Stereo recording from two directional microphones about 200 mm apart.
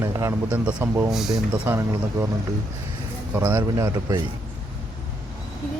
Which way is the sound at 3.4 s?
15° right (ahead or behind).